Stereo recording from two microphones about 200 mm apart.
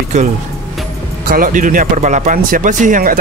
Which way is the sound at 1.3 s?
40° right (ahead or behind).